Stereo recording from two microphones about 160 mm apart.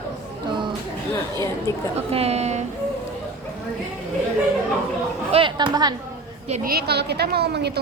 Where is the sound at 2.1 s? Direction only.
40° right (ahead or behind).